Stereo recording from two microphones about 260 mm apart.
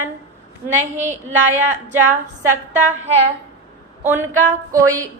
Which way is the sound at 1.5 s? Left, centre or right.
Centre.